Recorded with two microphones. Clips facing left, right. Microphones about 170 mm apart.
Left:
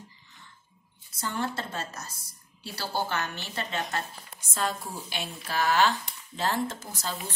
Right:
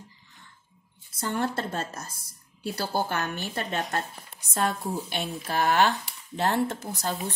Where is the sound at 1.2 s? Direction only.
55° right (ahead or behind).